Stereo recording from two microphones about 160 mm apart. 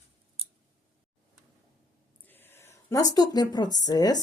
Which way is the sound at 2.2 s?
15° left (ahead or behind).